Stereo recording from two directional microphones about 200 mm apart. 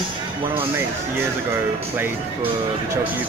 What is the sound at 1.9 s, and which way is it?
Speech, 10° right (ahead or behind).